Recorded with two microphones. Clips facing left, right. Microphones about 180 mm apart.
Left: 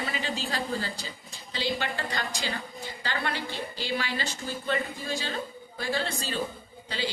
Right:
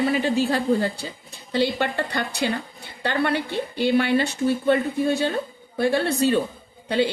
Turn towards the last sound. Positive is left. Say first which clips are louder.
# right 11 dB
turn(degrees=-60)  # may be behind; listen again after turning